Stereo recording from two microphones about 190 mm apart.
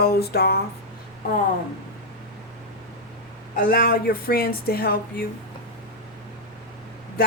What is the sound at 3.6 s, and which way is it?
Speech, 50° left (ahead or behind).